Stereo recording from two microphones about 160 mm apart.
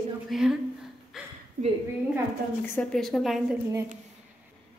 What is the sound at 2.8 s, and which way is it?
Speech, 5° left (ahead or behind).